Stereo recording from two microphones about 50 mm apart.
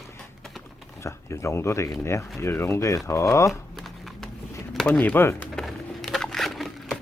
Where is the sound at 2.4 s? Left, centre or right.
Left.